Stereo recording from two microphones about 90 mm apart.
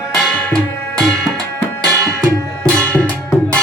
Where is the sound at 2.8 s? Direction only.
15° left (ahead or behind).